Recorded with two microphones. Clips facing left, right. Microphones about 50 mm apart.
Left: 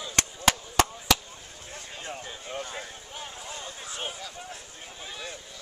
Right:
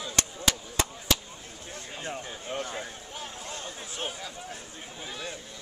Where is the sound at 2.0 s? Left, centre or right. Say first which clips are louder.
Right 2 dB; right.